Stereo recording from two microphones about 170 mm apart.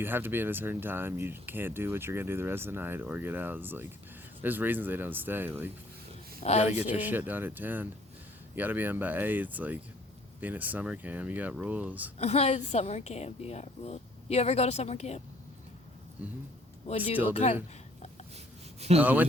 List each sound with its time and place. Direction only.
0.0 s speech: 10° right (ahead or behind)
6.4 s a woman's voice: 40° left (ahead or behind)
7.0 s speech: 10° right (ahead or behind)
12.2 s a woman's voice: 40° left (ahead or behind)
17.0 s speech: 10° right (ahead or behind)
17.3 s a woman's voice: 40° left (ahead or behind)
18.8 s speech: 40° right (ahead or behind)